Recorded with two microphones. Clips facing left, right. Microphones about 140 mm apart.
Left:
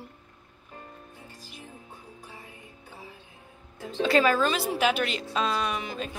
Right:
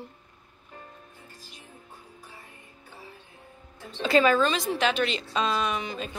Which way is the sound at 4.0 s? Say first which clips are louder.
Right 1 dB; centre (ahead or behind).